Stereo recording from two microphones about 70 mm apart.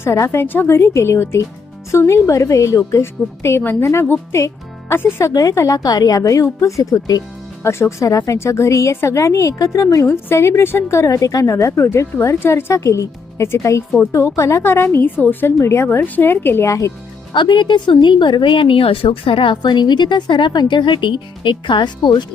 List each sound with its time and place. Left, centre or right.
0.0 s a woman's voice: left
5.3 s a woman's voice: left
7.6 s a woman's voice: left
11.4 s a woman's voice: left
15.5 s a woman's voice: left
16.6 s a woman's voice: left
17.4 s a woman's voice: left
19.6 s a woman's voice: left